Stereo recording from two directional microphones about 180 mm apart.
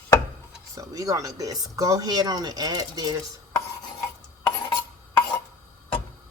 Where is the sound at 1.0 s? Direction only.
20° right (ahead or behind).